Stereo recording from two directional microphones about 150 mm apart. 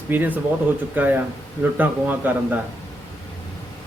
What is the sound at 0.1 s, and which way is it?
A man's voice, 10° right (ahead or behind).